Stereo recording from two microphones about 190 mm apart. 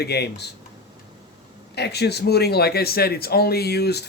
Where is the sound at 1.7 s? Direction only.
60° left (ahead or behind).